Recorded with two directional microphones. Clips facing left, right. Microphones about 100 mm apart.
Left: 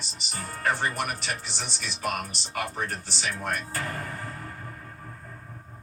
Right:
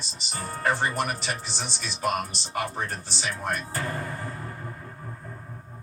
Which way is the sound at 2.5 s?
25° right (ahead or behind).